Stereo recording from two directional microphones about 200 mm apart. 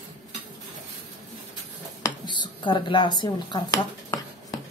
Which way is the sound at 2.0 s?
20° left (ahead or behind).